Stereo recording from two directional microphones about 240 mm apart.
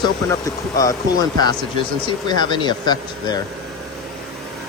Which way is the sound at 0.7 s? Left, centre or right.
Centre.